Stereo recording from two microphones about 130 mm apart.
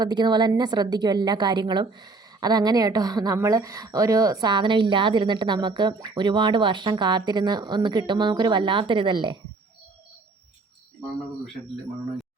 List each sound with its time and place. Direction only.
0.0 s speech: 35° right (ahead or behind)